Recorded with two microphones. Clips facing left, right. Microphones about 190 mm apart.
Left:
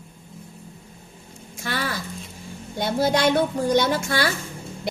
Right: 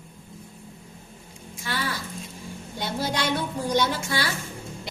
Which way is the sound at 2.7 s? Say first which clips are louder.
Left 7 dB; 55° left (ahead or behind).